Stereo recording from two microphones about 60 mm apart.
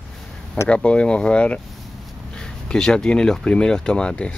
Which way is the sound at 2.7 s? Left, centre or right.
Centre.